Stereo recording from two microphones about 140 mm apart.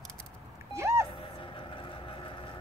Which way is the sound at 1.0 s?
40° left (ahead or behind).